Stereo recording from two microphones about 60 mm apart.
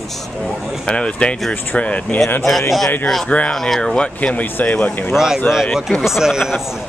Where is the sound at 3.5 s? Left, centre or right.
Centre.